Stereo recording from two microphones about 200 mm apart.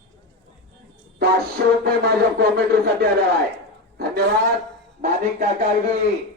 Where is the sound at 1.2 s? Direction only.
50° right (ahead or behind).